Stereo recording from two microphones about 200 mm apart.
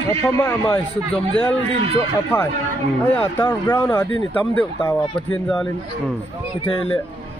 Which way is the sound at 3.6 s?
20° left (ahead or behind).